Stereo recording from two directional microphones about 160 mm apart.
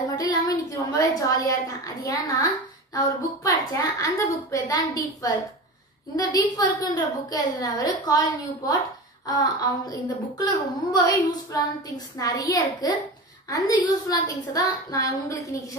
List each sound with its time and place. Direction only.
0.1 s a woman's voice: 25° left (ahead or behind)